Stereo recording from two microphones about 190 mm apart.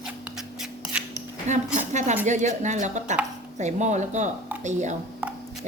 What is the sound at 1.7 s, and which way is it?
A woman's voice, 40° right (ahead or behind).